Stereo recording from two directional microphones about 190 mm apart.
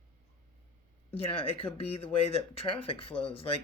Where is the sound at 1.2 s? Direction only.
30° left (ahead or behind).